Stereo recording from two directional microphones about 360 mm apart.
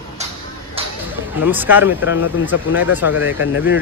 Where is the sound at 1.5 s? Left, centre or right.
Centre.